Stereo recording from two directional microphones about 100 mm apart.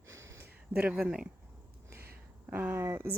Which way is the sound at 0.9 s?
5° right (ahead or behind).